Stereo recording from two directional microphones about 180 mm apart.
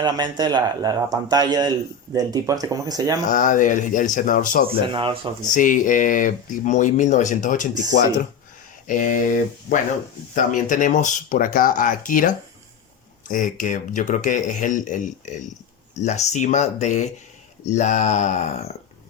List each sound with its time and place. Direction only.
0.0 s a man's voice: 25° right (ahead or behind)
3.2 s speech: 45° left (ahead or behind)
4.9 s a man's voice: 30° right (ahead or behind)
5.5 s speech: 45° left (ahead or behind)
8.9 s speech: 45° left (ahead or behind)